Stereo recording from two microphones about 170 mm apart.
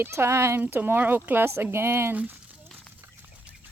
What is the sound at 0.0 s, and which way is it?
Speech, 15° right (ahead or behind).